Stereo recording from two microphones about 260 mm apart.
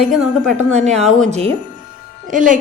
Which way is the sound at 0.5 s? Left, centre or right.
Right.